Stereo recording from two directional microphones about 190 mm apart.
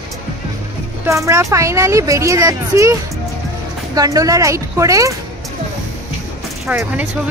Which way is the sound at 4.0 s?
20° right (ahead or behind).